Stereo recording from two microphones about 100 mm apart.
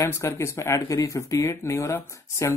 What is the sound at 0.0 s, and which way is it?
Speech, 25° left (ahead or behind).